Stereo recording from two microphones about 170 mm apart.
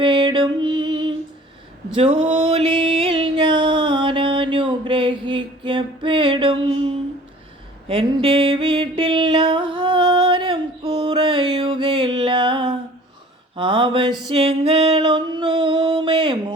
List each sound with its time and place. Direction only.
0.0 s music: 25° right (ahead or behind)
13.6 s a sound: 30° right (ahead or behind)
14.3 s music: 35° right (ahead or behind)